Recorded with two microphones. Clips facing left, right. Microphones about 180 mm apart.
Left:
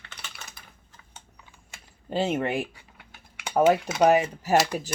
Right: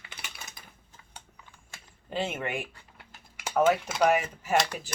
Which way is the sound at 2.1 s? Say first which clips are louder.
Left 6 dB; 35° left (ahead or behind).